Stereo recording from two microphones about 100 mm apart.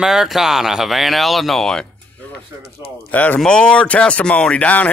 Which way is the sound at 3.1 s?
15° left (ahead or behind).